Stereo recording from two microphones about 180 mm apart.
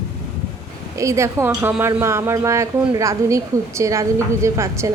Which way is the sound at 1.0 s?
15° right (ahead or behind).